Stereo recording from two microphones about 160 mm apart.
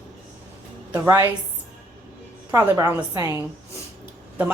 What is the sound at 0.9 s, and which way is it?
Speech, 15° right (ahead or behind).